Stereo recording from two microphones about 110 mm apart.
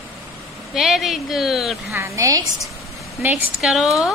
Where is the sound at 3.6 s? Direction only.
Centre (ahead or behind).